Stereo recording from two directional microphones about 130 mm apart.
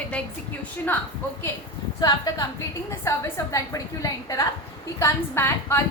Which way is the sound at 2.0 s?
30° left (ahead or behind).